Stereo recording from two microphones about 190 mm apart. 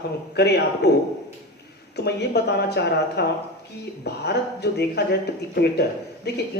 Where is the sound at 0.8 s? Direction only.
60° left (ahead or behind).